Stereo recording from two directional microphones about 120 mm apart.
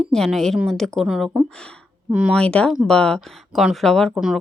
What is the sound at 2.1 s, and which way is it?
Speech, 10° right (ahead or behind).